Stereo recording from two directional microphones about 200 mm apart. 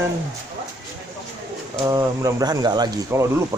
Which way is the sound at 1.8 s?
15° right (ahead or behind).